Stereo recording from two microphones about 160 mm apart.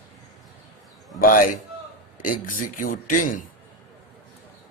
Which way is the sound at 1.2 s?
60° left (ahead or behind).